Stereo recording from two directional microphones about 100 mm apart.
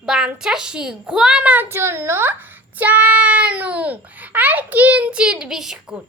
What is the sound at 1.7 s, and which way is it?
A child's voice, 25° right (ahead or behind).